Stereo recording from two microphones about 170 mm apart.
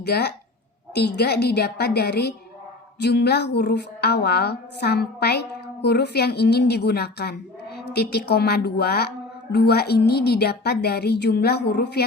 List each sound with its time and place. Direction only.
0.0 s a woman's voice: 70° left (ahead or behind)